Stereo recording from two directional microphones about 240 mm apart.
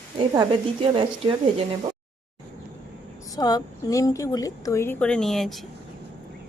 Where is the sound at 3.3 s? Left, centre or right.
Centre.